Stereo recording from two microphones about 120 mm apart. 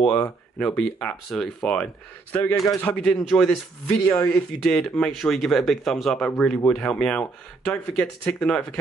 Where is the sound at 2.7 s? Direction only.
10° left (ahead or behind).